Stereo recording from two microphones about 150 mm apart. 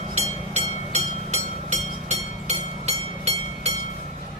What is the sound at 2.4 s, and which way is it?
Vehicle, 45° right (ahead or behind).